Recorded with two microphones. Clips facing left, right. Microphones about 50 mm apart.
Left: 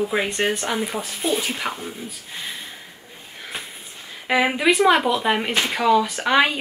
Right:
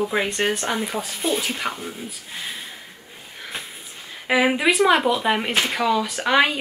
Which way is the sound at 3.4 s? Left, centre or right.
Centre.